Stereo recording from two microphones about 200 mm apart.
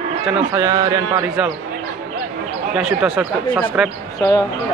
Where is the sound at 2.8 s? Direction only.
Centre (ahead or behind).